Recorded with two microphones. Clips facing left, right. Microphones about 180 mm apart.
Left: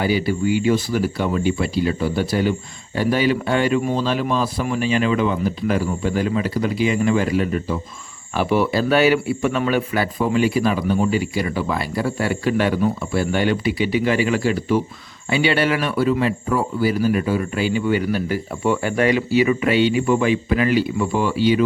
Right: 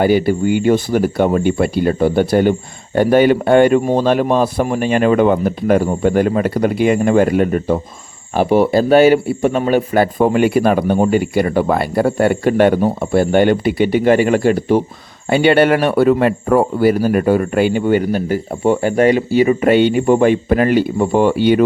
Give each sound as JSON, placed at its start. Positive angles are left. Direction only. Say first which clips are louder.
{"t": 0.0, "sound": "a man's voice", "louder": "right 6 dB", "side_deg": -55}